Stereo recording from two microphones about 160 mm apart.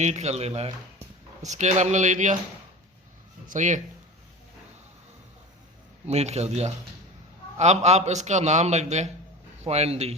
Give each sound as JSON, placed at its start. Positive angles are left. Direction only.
{"t": 0.0, "sound": "a man's voice", "side_deg": -45}
{"t": 3.5, "sound": "a man's voice", "side_deg": -50}
{"t": 6.1, "sound": "a man's voice", "side_deg": -45}